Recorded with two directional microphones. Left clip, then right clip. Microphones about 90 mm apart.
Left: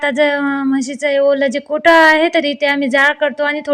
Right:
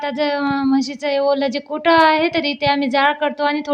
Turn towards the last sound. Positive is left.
turn(degrees=15)  # may be behind; listen again after turning